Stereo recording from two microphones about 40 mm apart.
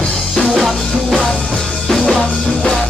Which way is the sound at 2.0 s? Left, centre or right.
Left.